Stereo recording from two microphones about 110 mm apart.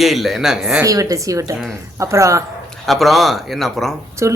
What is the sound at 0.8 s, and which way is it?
A woman's voice, 30° right (ahead or behind).